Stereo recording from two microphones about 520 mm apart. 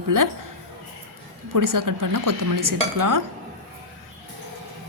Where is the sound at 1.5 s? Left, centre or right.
Right.